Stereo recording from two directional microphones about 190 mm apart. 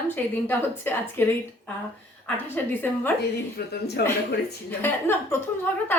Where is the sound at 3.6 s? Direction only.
55° left (ahead or behind).